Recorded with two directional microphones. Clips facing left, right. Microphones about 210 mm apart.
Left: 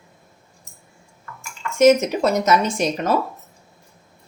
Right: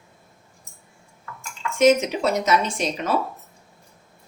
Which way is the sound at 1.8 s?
45° left (ahead or behind).